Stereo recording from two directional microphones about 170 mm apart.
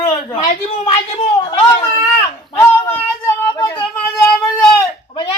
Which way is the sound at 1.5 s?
30° left (ahead or behind).